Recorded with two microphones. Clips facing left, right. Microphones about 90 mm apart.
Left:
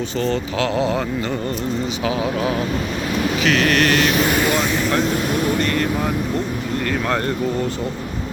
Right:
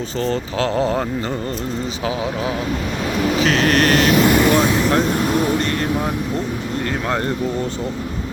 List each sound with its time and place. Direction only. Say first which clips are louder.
0.2 s speech: right 1 dB; 35° right (ahead or behind)
3.4 s speech: even; 35° right (ahead or behind)